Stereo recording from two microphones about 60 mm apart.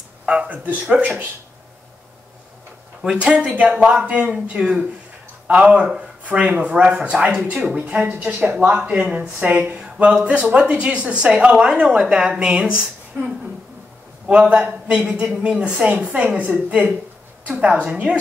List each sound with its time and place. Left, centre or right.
0.2 s speech: right
3.0 s speech: centre
8.4 s speech: right
8.6 s speech: right
9.8 s a sound: centre
10.2 s speech: right
14.2 s a man's voice: centre